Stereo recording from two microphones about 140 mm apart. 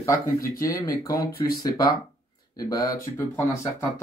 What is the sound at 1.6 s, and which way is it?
Speech, 30° left (ahead or behind).